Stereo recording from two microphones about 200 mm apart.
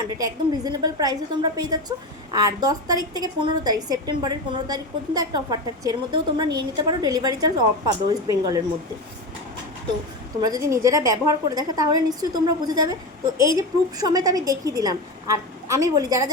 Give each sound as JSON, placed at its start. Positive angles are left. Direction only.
{"t": 0.2, "sound": "a woman's voice", "side_deg": -20}
{"t": 10.4, "sound": "a woman's voice", "side_deg": -15}